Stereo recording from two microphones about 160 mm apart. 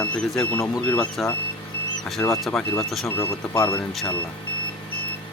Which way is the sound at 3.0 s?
15° left (ahead or behind).